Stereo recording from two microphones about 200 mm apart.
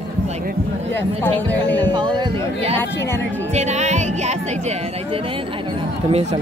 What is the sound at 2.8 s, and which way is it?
Speech, 10° left (ahead or behind).